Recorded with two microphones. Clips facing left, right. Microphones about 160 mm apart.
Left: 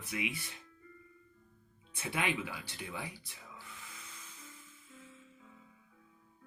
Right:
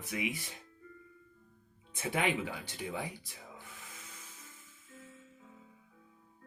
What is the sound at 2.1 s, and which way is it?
Speech, 45° right (ahead or behind).